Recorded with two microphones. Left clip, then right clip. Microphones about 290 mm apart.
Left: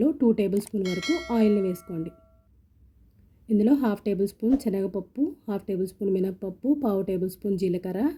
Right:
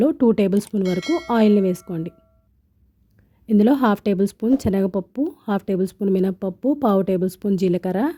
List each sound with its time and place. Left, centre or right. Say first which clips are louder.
0.0 s speech: right 6 dB; right
0.8 s speech: right 5 dB; centre
1.3 s speech: right 7 dB; right
3.4 s speech: right 6 dB; right